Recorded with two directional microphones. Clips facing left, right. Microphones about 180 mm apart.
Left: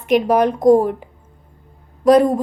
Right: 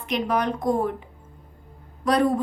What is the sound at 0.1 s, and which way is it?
Speech, 45° left (ahead or behind).